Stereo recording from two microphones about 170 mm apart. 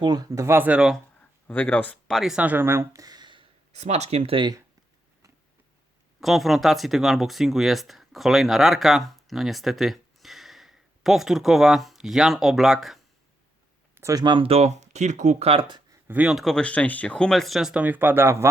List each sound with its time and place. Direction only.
0.0 s speech: 25° right (ahead or behind); by 0.9 s 5° right (ahead or behind)
1.5 s speech: 10° left (ahead or behind); by 3.4 s 25° right (ahead or behind)
3.7 s speech: 40° right (ahead or behind)
6.1 s speech: centre (ahead or behind)
13.9 s speech: 20° right (ahead or behind)
15.9 s speech: 10° right (ahead or behind)